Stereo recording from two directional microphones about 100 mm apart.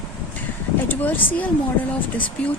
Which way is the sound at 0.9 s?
15° left (ahead or behind).